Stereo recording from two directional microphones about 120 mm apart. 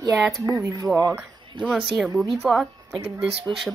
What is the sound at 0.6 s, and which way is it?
Speech, 30° right (ahead or behind).